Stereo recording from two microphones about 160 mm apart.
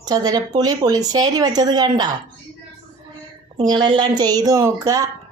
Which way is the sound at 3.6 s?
30° right (ahead or behind).